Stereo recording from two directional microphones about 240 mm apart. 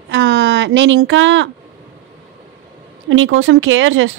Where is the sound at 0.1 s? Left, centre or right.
Right.